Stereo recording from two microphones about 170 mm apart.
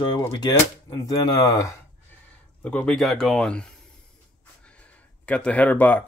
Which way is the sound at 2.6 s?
5° left (ahead or behind).